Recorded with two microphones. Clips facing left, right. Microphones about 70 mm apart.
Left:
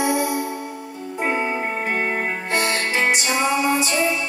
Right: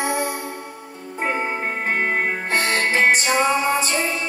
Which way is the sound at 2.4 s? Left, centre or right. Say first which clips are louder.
Even; right.